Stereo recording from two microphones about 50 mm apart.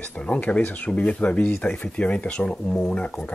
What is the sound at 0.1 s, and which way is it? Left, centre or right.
Speech, left.